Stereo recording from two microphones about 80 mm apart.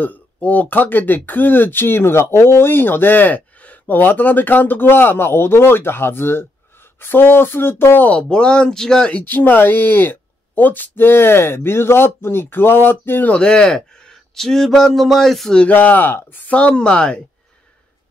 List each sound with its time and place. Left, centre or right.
0.0 s speech: left
8.1 s speech: centre
9.3 s speech: left
13.3 s speech: centre
15.6 s speech: left